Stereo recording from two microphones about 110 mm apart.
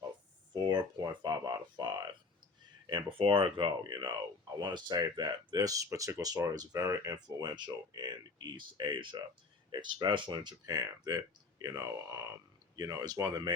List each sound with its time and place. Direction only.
0.5 s speech: 45° right (ahead or behind)
2.9 s speech: 55° right (ahead or behind); by 7.2 s 25° right (ahead or behind)
7.2 s speech: 40° right (ahead or behind)